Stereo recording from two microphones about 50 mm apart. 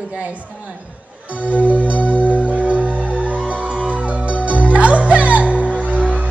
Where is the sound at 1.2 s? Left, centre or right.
Right.